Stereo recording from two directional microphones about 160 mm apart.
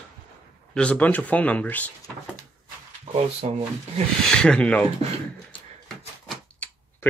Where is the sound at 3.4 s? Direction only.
40° right (ahead or behind).